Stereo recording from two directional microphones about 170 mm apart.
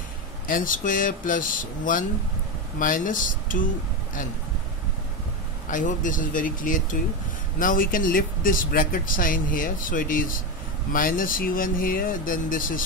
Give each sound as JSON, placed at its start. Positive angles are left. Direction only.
{"t": 0.5, "sound": "speech", "side_deg": 55}
{"t": 5.7, "sound": "speech", "side_deg": 50}